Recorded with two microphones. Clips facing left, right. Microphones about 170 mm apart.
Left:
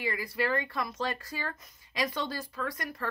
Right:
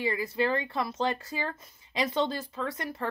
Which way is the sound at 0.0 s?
25° right (ahead or behind).